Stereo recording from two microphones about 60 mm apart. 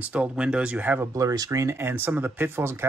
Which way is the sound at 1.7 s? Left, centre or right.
Right.